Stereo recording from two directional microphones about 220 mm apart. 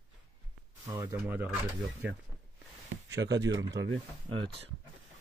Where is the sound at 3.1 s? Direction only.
50° right (ahead or behind).